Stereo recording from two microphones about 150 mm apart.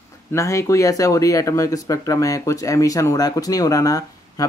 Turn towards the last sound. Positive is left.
turn(degrees=25)  # may be behind; listen again after turning